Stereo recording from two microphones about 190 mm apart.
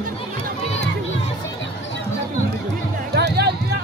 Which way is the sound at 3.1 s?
60° right (ahead or behind).